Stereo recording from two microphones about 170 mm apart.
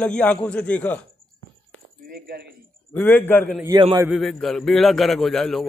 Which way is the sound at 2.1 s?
65° right (ahead or behind).